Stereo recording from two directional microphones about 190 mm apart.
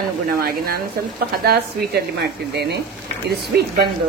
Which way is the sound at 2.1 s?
60° right (ahead or behind).